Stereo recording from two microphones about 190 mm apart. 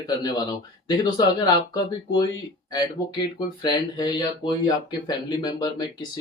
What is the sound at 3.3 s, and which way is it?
Speech, 25° left (ahead or behind).